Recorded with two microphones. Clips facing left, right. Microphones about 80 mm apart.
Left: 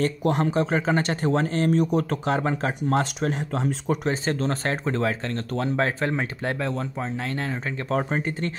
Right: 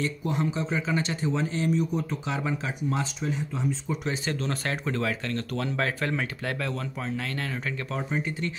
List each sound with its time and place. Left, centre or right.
0.2 s speech: left
1.8 s speech: left
2.2 s speech: left
4.1 s speech: left
7.9 s speech: left